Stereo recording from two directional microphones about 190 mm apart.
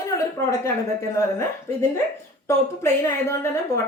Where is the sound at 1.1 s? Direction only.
15° left (ahead or behind).